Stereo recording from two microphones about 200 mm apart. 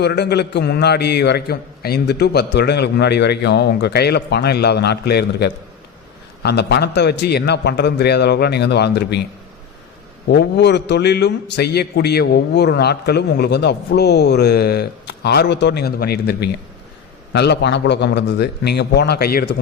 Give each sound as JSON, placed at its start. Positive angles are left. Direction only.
{"t": 0.0, "sound": "a man's voice", "side_deg": 55}
{"t": 10.2, "sound": "a man's voice", "side_deg": 55}